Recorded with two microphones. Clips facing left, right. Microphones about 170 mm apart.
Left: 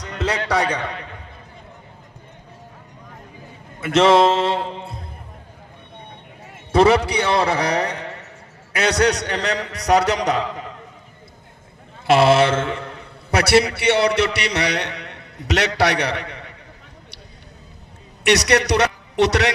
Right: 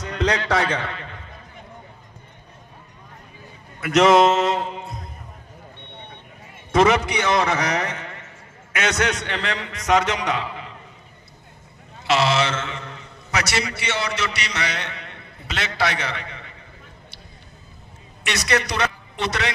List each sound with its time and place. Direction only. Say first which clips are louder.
0.0 s a sound: right 2 dB; 5° left (ahead or behind)
0.5 s a man's voice: left 1 dB; 15° left (ahead or behind)
3.8 s a man's voice: left 1 dB; 30° left (ahead or behind)
6.7 s basketball bounce: left 3 dB; 35° left (ahead or behind)
7.1 s a man's voice: left 2 dB; 35° left (ahead or behind)
12.1 s a man's voice: left 6 dB; 55° left (ahead or behind)
18.2 s a man's voice: left 7 dB; 70° left (ahead or behind)